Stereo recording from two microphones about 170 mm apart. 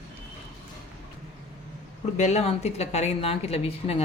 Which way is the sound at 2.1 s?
40° left (ahead or behind).